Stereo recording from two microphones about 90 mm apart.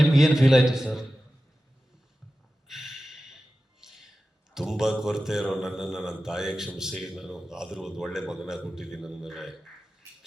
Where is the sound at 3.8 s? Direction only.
5° right (ahead or behind).